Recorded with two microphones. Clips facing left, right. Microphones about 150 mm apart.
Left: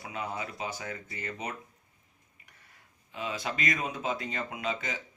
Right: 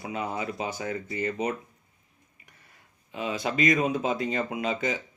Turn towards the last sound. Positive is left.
turn(degrees=-20)  # may be behind; listen again after turning